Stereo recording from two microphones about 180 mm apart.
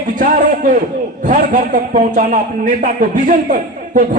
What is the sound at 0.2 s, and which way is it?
A man's voice, 50° right (ahead or behind).